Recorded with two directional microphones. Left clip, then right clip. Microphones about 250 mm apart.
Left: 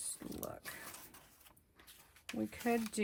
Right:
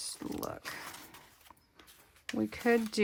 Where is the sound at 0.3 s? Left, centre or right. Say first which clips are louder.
Right 7 dB; right.